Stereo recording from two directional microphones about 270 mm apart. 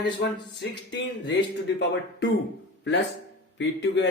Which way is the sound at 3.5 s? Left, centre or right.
Left.